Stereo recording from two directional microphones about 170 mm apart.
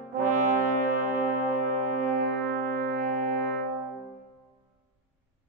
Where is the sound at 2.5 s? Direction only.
60° right (ahead or behind).